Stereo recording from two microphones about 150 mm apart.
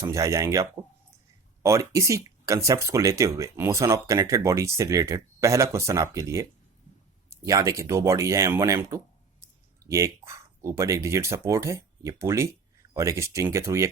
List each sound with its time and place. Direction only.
0.0 s speech: 20° right (ahead or behind)